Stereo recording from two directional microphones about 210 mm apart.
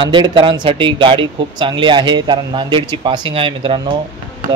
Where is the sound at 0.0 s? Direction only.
25° right (ahead or behind).